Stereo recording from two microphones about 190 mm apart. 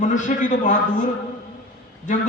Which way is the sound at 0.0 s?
40° left (ahead or behind).